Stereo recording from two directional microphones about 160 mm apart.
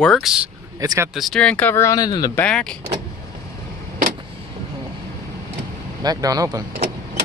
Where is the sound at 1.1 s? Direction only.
Centre (ahead or behind); by 2.3 s 25° left (ahead or behind).